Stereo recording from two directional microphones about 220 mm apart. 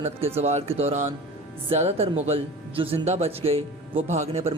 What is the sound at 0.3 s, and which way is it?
Speech, 30° right (ahead or behind).